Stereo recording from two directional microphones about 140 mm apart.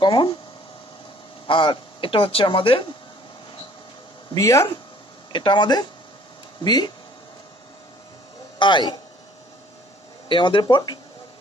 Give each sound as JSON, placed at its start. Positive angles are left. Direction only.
{"t": 0.0, "sound": "a sound", "side_deg": 35}
{"t": 1.5, "sound": "speech", "side_deg": 35}
{"t": 4.3, "sound": "speech", "side_deg": 20}
{"t": 5.3, "sound": "speech", "side_deg": 35}
{"t": 8.5, "sound": "speech", "side_deg": 35}
{"t": 10.2, "sound": "speech", "side_deg": 35}